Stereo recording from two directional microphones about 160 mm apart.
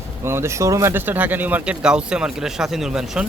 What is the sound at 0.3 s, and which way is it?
A man's voice, 15° right (ahead or behind).